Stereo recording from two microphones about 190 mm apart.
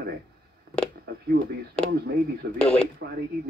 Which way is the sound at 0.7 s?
60° right (ahead or behind).